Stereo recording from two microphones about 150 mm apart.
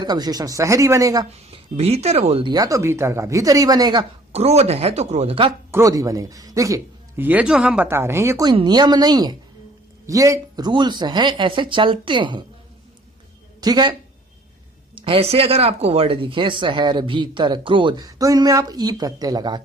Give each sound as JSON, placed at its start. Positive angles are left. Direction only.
{"t": 0.0, "sound": "speech", "side_deg": -25}
{"t": 1.4, "sound": "speech", "side_deg": -45}
{"t": 4.3, "sound": "a woman's voice", "side_deg": -45}
{"t": 5.7, "sound": "a man's voice", "side_deg": -20}
{"t": 7.3, "sound": "speech", "side_deg": -10}
{"t": 13.6, "sound": "speech", "side_deg": -30}
{"t": 14.9, "sound": "speech", "side_deg": -35}